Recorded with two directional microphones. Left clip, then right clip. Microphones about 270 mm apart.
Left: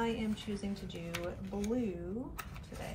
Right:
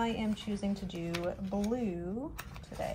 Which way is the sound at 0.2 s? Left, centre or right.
Right.